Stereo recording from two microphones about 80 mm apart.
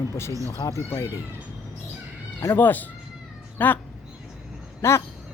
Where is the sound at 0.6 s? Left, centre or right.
Left.